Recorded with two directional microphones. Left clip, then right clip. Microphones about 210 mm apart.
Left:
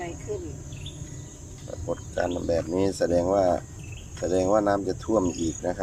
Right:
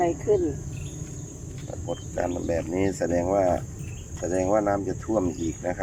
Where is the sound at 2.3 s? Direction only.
Centre (ahead or behind).